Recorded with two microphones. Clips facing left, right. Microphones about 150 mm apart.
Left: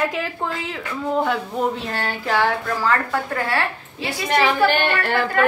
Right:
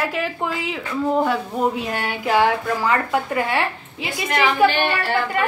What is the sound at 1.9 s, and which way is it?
A woman's voice, 15° right (ahead or behind).